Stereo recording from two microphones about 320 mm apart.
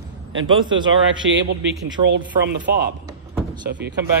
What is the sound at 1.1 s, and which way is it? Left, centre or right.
Speech, right.